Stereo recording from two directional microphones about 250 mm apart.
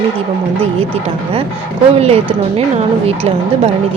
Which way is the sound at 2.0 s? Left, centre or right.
Right.